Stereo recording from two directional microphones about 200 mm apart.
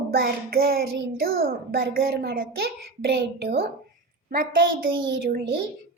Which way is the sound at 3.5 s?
50° right (ahead or behind).